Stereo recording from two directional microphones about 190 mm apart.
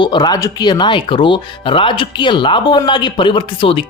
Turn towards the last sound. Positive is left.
turn(degrees=25)  # may be behind; listen again after turning